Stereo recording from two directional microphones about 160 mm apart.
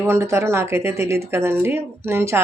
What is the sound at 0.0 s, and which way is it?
Speech, 15° right (ahead or behind).